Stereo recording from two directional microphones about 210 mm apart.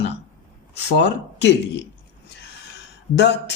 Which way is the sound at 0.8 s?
55° left (ahead or behind).